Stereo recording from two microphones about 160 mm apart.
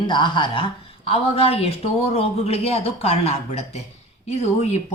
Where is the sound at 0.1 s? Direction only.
30° left (ahead or behind).